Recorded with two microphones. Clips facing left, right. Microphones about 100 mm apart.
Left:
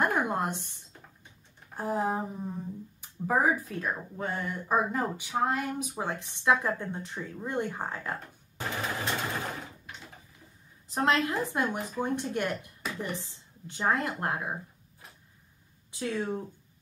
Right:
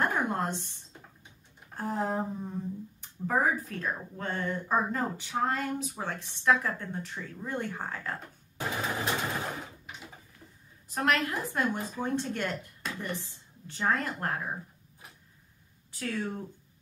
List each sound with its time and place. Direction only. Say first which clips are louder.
0.0 s a sound: left 1 dB; 15° left (ahead or behind)
1.8 s speech: left 1 dB; 15° left (ahead or behind)
8.5 s sewing machine: right 1 dB; 10° right (ahead or behind)
9.8 s a sound: right 1 dB; 10° right (ahead or behind)
10.9 s a woman's voice: left 2 dB; 25° left (ahead or behind)
16.0 s speech: left 2 dB; 20° left (ahead or behind)